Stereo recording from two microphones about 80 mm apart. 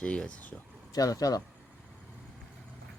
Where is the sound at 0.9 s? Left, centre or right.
Left.